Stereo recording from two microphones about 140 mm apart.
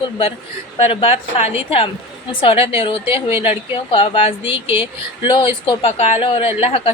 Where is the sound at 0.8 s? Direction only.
40° left (ahead or behind).